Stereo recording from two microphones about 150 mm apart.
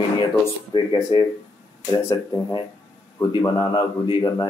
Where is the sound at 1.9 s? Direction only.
20° left (ahead or behind).